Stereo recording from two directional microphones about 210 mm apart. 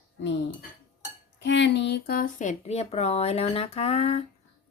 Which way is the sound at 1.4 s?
55° left (ahead or behind).